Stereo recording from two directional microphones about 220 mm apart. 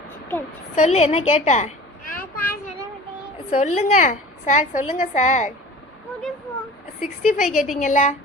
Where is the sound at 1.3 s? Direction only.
30° left (ahead or behind).